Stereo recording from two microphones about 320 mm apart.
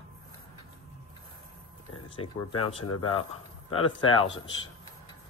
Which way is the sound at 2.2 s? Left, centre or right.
Left.